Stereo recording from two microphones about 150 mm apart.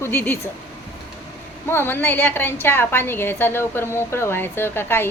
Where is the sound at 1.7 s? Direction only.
15° left (ahead or behind).